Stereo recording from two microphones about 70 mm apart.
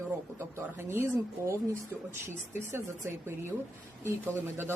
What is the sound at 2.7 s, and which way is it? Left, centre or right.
Speech, right.